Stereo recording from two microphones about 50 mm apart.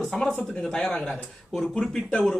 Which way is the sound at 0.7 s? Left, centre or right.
Centre.